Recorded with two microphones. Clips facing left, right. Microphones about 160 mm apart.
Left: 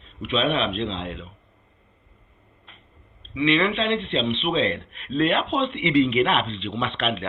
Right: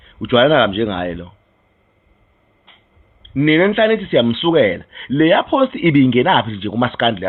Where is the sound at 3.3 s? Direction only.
50° right (ahead or behind).